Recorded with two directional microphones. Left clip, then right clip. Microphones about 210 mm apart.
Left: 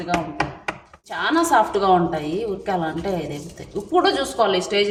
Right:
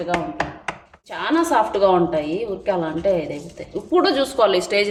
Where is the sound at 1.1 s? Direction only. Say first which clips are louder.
Left 1 dB; 15° right (ahead or behind).